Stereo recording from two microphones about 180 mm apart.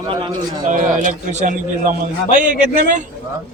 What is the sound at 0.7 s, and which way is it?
A man's voice, 45° right (ahead or behind).